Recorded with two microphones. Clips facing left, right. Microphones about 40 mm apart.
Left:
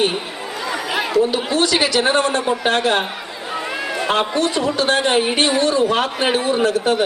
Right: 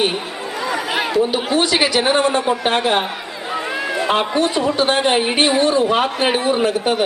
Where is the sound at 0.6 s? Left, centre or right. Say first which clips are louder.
Right 2 dB; centre.